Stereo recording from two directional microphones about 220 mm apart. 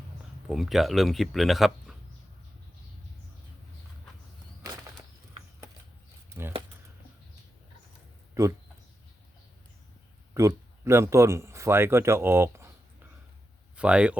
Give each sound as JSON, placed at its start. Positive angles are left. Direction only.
{"t": 0.4, "sound": "speech", "side_deg": 0}
{"t": 6.4, "sound": "a sound", "side_deg": -10}
{"t": 10.4, "sound": "speech", "side_deg": -15}
{"t": 13.7, "sound": "speech", "side_deg": -5}